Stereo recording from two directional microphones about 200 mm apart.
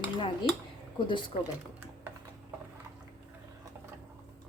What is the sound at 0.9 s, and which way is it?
Speech, 25° left (ahead or behind).